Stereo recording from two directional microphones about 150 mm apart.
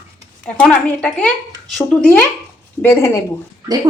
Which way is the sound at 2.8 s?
20° left (ahead or behind).